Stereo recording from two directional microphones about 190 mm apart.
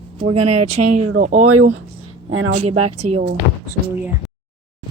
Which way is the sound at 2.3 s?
90° right.